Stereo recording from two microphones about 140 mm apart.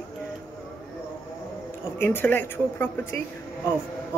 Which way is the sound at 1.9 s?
15° left (ahead or behind).